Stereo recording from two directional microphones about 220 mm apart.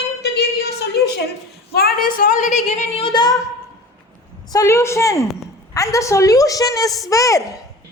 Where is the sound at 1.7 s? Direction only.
40° left (ahead or behind); by 3.3 s 20° left (ahead or behind).